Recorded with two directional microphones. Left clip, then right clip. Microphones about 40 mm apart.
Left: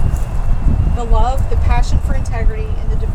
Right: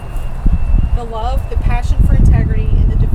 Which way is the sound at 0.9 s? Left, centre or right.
Centre.